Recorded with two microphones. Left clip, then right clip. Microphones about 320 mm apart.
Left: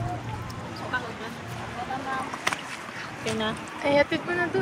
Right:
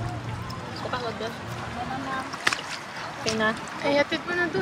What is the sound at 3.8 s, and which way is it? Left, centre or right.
Speech, centre.